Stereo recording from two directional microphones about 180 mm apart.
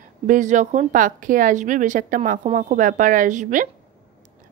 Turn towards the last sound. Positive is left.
turn(degrees=-45)  # may be behind; listen again after turning